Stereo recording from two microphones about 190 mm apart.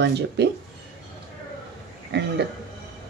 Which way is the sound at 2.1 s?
65° right (ahead or behind).